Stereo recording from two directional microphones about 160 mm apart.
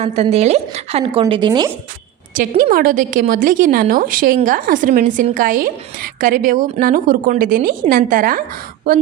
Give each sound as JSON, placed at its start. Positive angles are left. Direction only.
{"t": 0.0, "sound": "a woman's voice", "side_deg": -40}
{"t": 1.3, "sound": "speech", "side_deg": -30}
{"t": 2.6, "sound": "a woman's voice", "side_deg": -60}